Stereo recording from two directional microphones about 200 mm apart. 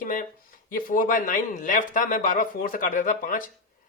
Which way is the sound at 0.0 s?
40° left (ahead or behind).